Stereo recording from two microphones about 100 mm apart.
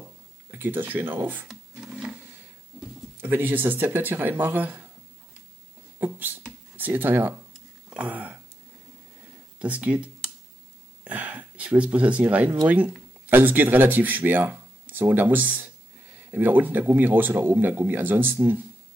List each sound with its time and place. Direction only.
0.5 s speech: 20° right (ahead or behind)
1.8 s printer: 15° right (ahead or behind)
3.2 s speech: 20° right (ahead or behind)
5.9 s a sound: 20° right (ahead or behind)
6.8 s speech: 20° right (ahead or behind)
7.9 s a sound: 15° right (ahead or behind)
9.6 s speech: 15° right (ahead or behind)
11.1 s a sound: 15° right (ahead or behind)
12.6 s speech: 15° right (ahead or behind)